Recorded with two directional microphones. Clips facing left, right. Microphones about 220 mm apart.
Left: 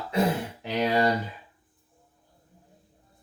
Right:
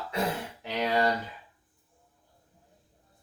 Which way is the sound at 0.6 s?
20° left (ahead or behind).